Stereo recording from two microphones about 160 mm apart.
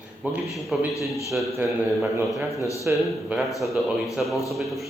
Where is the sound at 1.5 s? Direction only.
15° right (ahead or behind).